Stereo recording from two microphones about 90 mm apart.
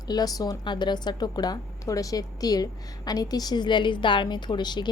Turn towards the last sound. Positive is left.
turn(degrees=55)  # may be behind; listen again after turning